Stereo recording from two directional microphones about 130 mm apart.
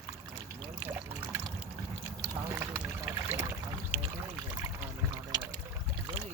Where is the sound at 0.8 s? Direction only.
15° right (ahead or behind).